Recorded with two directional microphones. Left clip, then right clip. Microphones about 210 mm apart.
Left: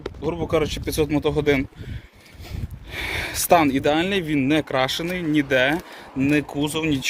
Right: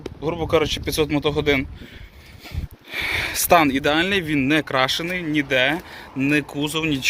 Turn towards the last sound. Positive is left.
turn(degrees=10)  # may be behind; listen again after turning